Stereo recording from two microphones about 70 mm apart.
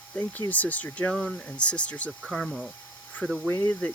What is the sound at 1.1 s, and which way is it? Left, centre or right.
Speech, centre.